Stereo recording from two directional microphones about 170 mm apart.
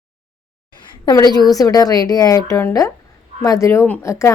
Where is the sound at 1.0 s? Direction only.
25° left (ahead or behind).